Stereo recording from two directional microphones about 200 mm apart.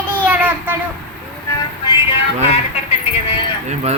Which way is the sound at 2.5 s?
30° left (ahead or behind).